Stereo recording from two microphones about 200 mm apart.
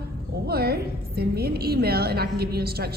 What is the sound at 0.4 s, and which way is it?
A woman's voice, 50° right (ahead or behind).